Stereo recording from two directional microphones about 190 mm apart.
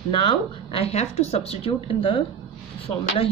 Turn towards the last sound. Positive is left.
turn(degrees=30)  # may be behind; listen again after turning